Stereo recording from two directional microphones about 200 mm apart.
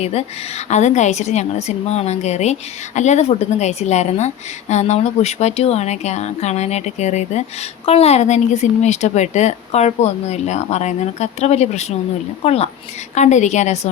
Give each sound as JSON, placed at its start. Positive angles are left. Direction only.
{"t": 0.0, "sound": "a woman's voice", "side_deg": 30}